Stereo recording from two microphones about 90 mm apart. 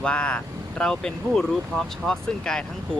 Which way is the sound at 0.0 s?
10° left (ahead or behind).